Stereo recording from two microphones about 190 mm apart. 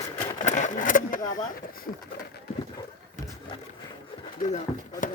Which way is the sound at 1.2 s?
20° left (ahead or behind).